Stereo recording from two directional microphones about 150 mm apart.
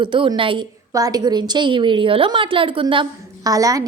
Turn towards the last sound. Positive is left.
turn(degrees=-25)  # may be behind; listen again after turning